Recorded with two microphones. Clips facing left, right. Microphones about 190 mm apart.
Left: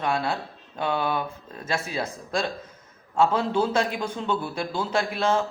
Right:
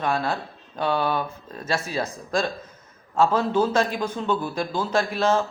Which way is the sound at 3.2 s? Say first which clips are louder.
Right 2 dB; 10° left (ahead or behind).